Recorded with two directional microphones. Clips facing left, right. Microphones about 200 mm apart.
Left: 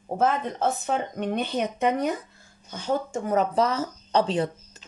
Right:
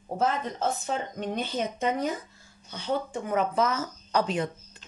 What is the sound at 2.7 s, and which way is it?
A woman's voice, 45° left (ahead or behind).